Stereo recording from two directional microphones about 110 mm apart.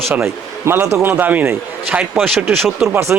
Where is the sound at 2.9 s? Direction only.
25° right (ahead or behind).